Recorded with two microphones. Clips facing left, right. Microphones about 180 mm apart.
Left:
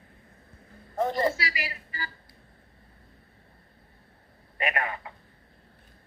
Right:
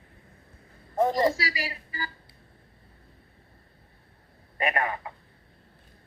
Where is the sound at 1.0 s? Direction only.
40° right (ahead or behind).